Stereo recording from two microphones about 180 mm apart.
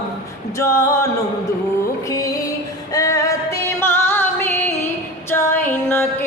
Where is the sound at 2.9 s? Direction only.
20° left (ahead or behind).